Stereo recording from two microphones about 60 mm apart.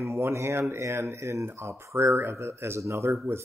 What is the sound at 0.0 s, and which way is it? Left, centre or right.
A man's voice, right.